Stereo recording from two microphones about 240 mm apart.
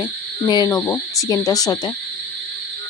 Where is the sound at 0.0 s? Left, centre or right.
Centre.